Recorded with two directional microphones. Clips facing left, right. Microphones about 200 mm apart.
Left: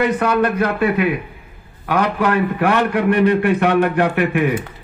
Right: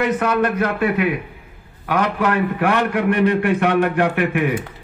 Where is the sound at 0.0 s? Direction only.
35° left (ahead or behind).